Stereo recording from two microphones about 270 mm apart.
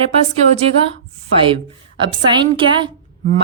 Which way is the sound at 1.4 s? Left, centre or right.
Centre.